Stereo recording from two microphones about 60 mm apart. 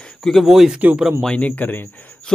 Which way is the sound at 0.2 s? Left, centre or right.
Centre.